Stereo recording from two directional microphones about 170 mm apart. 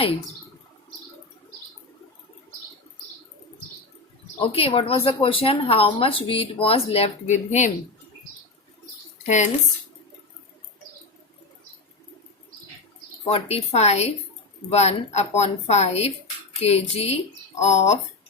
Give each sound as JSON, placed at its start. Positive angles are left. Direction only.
{"t": 4.4, "sound": "speech", "side_deg": 35}
{"t": 9.2, "sound": "speech", "side_deg": 45}
{"t": 13.2, "sound": "speech", "side_deg": 35}